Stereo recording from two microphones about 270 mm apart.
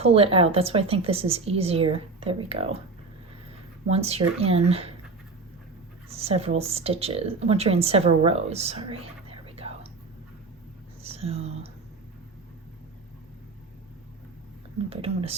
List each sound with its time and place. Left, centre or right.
0.0 s speech: right
3.8 s speech: right
6.1 s speech: right
11.0 s speech: right
14.8 s speech: right